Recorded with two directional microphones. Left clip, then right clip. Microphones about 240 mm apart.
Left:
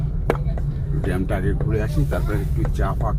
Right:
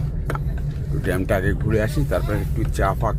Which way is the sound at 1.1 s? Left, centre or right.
Right.